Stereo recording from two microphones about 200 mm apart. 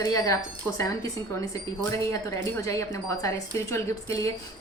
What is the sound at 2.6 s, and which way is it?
A woman's voice, 15° left (ahead or behind).